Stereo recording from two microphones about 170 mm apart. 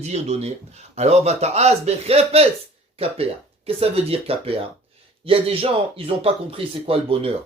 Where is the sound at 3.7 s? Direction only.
35° right (ahead or behind).